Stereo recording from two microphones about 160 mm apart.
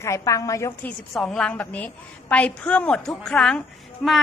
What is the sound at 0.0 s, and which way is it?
A woman's voice, 20° left (ahead or behind).